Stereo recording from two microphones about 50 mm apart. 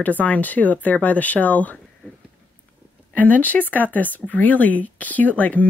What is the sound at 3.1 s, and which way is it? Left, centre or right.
Speech, left.